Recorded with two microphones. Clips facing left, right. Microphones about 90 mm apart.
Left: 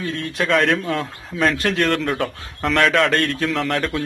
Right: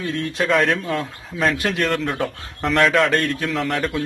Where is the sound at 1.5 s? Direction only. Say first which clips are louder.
Left 2 dB; 15° right (ahead or behind).